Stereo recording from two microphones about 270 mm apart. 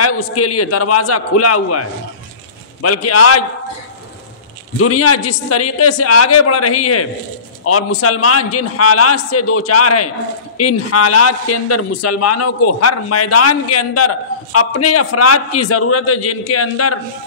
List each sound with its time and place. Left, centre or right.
0.0 s a man's voice: left
4.7 s a man's voice: left